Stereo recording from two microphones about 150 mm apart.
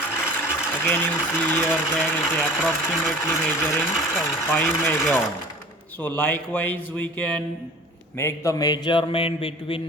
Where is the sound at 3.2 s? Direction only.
15° left (ahead or behind).